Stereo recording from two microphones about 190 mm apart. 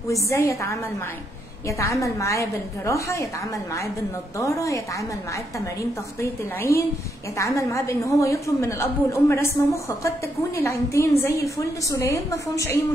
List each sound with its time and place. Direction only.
0.1 s a woman's voice: 15° left (ahead or behind)
4.4 s a woman's voice: 15° left (ahead or behind)
6.2 s a woman's voice: 15° left (ahead or behind)